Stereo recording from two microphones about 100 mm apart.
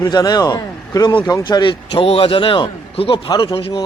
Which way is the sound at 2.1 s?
70° left (ahead or behind).